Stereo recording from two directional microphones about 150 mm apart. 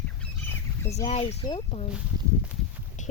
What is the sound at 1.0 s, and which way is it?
Speech, 45° left (ahead or behind).